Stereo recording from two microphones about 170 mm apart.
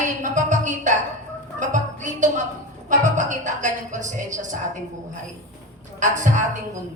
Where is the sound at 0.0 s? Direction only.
50° right (ahead or behind).